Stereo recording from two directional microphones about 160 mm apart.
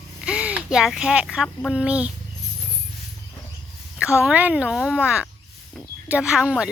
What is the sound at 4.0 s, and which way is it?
A woman's voice, 5° right (ahead or behind).